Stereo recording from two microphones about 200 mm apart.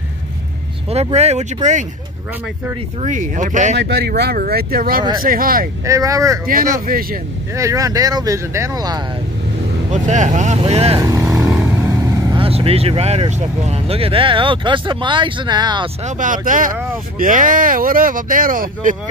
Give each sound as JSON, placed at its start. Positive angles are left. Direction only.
{"t": 0.8, "sound": "speech", "side_deg": -30}
{"t": 3.0, "sound": "speech", "side_deg": -40}
{"t": 3.7, "sound": "speech", "side_deg": -55}
{"t": 5.9, "sound": "speech", "side_deg": -15}
{"t": 6.4, "sound": "speech", "side_deg": -45}
{"t": 7.5, "sound": "speech", "side_deg": -15}
{"t": 9.8, "sound": "speech", "side_deg": -35}
{"t": 11.0, "sound": "vehicle", "side_deg": -15}
{"t": 12.3, "sound": "speech", "side_deg": -25}
{"t": 16.0, "sound": "speech", "side_deg": -40}